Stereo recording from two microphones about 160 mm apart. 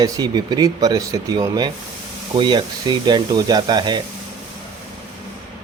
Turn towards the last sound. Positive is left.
turn(degrees=-25)  # may be behind; listen again after turning